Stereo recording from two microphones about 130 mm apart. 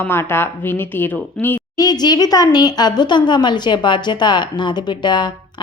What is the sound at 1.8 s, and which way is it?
A woman's voice, 30° left (ahead or behind).